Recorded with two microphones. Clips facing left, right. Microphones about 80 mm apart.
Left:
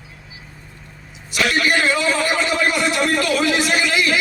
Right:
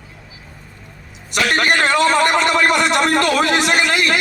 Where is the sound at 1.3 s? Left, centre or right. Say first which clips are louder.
Right 2 dB; right.